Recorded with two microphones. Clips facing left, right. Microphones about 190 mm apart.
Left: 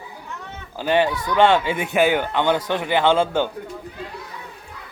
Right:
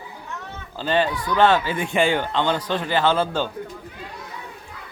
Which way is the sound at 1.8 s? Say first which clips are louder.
Left 2 dB; 5° left (ahead or behind).